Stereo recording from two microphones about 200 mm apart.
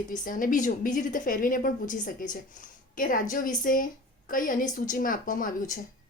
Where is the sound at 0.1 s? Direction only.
45° left (ahead or behind).